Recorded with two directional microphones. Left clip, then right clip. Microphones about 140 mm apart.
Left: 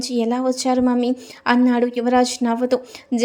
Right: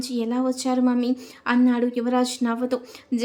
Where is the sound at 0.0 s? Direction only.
30° left (ahead or behind).